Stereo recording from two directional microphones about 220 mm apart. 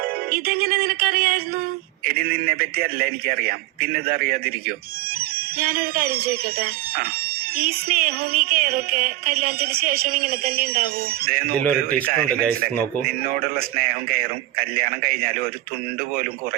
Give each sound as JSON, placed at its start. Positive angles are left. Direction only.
{"t": 0.3, "sound": "music", "side_deg": -45}
{"t": 5.5, "sound": "music", "side_deg": -40}